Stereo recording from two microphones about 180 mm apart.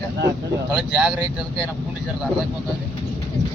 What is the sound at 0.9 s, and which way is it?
Speech, 5° right (ahead or behind).